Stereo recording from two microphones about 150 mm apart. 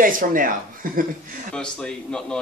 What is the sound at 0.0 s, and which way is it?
Speech, 65° right (ahead or behind).